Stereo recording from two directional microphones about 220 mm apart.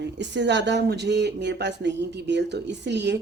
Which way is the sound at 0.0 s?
50° right (ahead or behind).